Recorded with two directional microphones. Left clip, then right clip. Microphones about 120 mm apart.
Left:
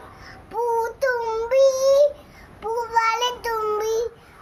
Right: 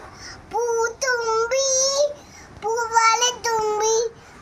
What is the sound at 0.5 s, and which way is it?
Child singing, 15° left (ahead or behind).